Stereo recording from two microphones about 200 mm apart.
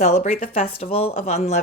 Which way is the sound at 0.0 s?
35° left (ahead or behind).